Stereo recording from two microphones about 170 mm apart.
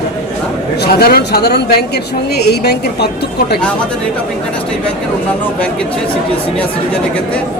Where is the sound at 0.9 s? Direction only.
65° left (ahead or behind).